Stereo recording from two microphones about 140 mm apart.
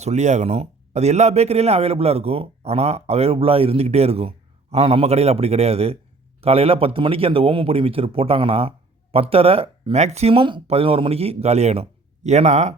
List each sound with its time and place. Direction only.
0.0 s a man's voice: 55° right (ahead or behind)